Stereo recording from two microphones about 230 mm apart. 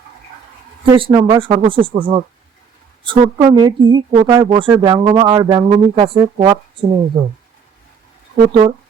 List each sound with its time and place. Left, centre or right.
0.9 s speech: centre